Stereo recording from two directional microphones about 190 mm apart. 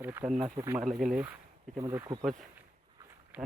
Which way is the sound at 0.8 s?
Centre (ahead or behind).